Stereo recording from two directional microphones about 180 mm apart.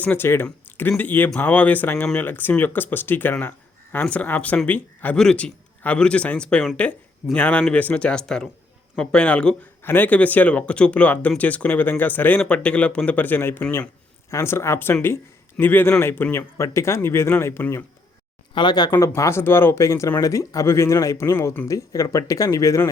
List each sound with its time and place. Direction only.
0.0 s speech: 10° left (ahead or behind)
18.5 s speech: 25° left (ahead or behind)